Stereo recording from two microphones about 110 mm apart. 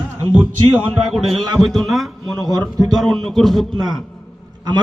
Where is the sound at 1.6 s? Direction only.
Centre (ahead or behind).